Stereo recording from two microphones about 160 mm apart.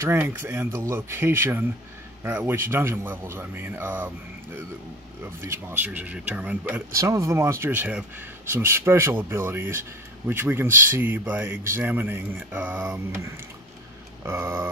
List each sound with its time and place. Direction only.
0.0 s speech: 15° right (ahead or behind)
5.4 s speech: 15° right (ahead or behind)
7.0 s speech: 20° right (ahead or behind)